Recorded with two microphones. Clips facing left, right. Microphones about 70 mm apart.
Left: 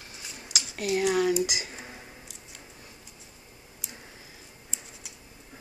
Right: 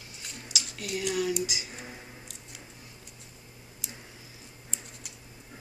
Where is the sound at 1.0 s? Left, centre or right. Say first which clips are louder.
Left 5 dB; left.